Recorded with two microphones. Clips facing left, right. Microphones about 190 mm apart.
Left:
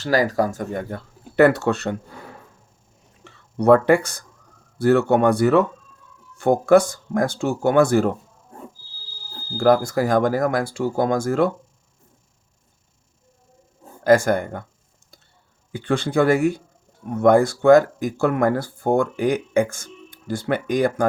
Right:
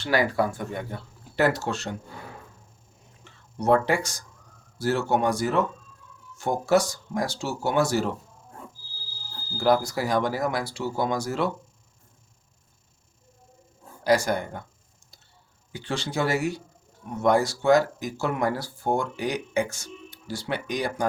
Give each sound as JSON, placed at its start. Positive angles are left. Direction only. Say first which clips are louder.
{"t": 0.0, "sound": "speech", "louder": "left 4 dB", "side_deg": 40}
{"t": 3.6, "sound": "speech", "louder": "left 7 dB", "side_deg": 55}
{"t": 9.6, "sound": "speech", "louder": "left 6 dB", "side_deg": 50}
{"t": 14.0, "sound": "speech", "louder": "left 6 dB", "side_deg": 50}
{"t": 15.7, "sound": "speech", "louder": "left 9 dB", "side_deg": 55}